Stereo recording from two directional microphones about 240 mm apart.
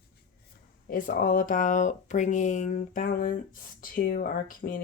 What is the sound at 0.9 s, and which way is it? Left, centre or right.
Speech, left.